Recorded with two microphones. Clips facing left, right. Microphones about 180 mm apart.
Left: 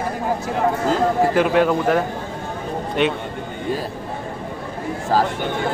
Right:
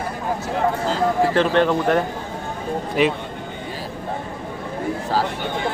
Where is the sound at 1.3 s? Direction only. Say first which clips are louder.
Left 1 dB; 10° left (ahead or behind).